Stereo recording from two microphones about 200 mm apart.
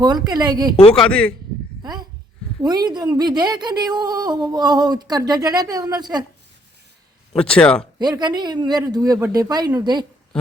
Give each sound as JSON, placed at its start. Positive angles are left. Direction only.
{"t": 0.0, "sound": "speech", "side_deg": -20}
{"t": 0.9, "sound": "speech", "side_deg": 5}
{"t": 1.8, "sound": "a sound", "side_deg": -20}
{"t": 2.6, "sound": "speech", "side_deg": -20}
{"t": 7.3, "sound": "speech", "side_deg": 5}
{"t": 7.9, "sound": "speech", "side_deg": -20}